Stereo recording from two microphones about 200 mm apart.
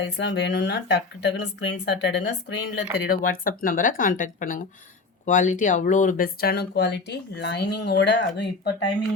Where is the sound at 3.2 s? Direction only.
45° left (ahead or behind); by 8.2 s 60° left (ahead or behind).